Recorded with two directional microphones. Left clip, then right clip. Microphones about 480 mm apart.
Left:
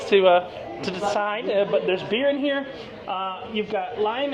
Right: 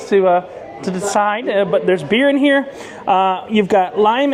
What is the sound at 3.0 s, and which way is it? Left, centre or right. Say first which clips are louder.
Speech: right 14 dB; right.